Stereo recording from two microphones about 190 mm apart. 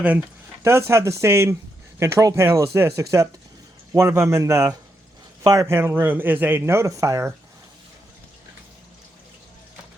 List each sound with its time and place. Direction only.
0.0 s speech: 10° right (ahead or behind)